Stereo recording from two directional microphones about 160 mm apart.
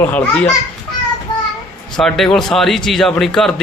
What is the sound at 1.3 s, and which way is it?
Child singing, 25° left (ahead or behind).